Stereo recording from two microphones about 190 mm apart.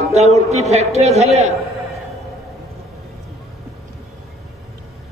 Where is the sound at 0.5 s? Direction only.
35° right (ahead or behind).